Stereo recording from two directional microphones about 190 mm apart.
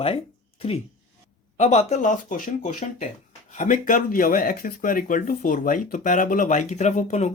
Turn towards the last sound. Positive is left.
turn(degrees=40)  # may be behind; listen again after turning